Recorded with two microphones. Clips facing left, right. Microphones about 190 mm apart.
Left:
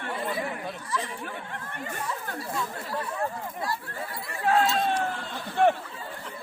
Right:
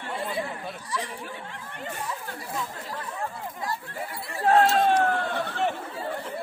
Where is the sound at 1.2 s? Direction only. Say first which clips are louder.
Left 1 dB; 55° left (ahead or behind).